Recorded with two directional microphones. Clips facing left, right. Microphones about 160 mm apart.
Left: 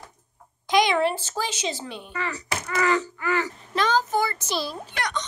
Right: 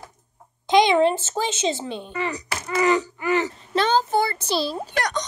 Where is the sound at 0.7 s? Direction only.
25° right (ahead or behind).